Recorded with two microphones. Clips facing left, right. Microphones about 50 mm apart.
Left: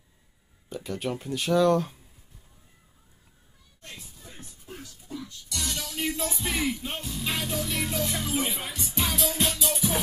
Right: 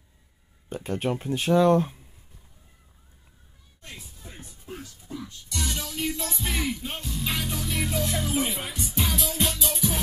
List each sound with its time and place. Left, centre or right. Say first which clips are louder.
0.7 s speech: right 3 dB; right
3.9 s music: right 2 dB; centre
5.9 s music: even; centre